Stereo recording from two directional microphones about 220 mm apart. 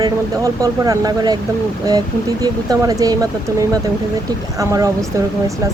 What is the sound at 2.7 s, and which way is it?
Speech, 15° right (ahead or behind).